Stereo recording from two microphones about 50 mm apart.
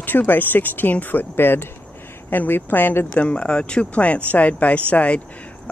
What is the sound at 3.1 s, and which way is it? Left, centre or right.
Speech, left.